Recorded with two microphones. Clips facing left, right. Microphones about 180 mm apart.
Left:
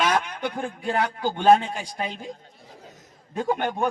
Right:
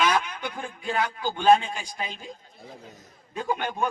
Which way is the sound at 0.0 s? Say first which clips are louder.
Left 1 dB; 45° left (ahead or behind).